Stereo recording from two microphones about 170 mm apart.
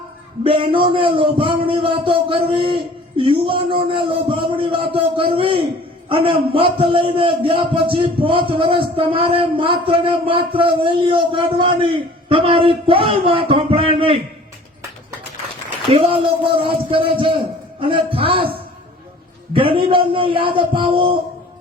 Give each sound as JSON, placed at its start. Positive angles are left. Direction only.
{"t": 0.4, "sound": "a man's voice", "side_deg": -30}
{"t": 15.9, "sound": "a man's voice", "side_deg": -35}